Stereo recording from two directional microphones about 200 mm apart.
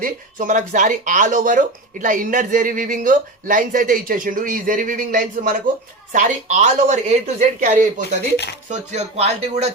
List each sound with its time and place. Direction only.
0.0 s speech: 40° right (ahead or behind)